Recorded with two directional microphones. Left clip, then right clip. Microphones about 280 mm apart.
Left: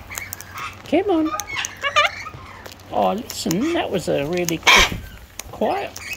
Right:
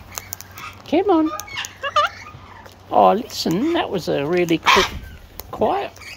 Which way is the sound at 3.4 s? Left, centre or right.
Centre.